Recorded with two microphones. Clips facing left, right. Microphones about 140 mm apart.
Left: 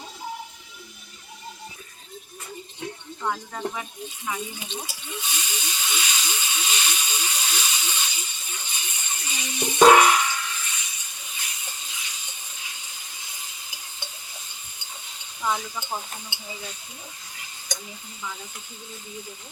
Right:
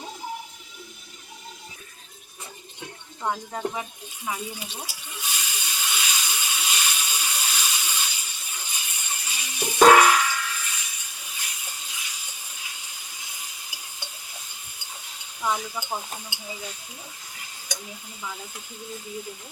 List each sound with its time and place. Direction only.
3.2 s speech: 20° right (ahead or behind)
4.3 s snake: 5° right (ahead or behind)
15.4 s speech: 5° right (ahead or behind)